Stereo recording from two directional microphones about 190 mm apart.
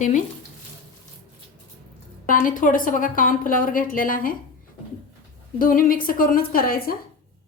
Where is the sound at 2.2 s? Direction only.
45° left (ahead or behind).